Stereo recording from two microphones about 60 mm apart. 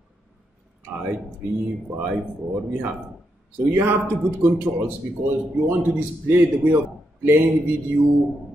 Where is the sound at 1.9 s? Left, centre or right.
Right.